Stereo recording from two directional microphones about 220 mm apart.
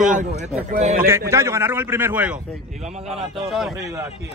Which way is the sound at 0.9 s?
10° right (ahead or behind).